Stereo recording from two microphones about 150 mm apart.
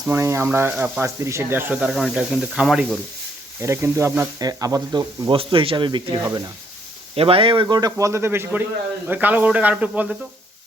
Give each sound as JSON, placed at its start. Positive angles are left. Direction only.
{"t": 0.1, "sound": "speech", "side_deg": -15}
{"t": 3.6, "sound": "speech", "side_deg": -20}